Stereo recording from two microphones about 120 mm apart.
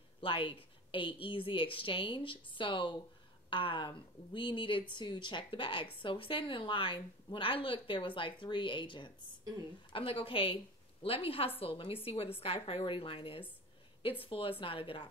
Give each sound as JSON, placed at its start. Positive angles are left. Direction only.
{"t": 0.2, "sound": "a woman's voice", "side_deg": 45}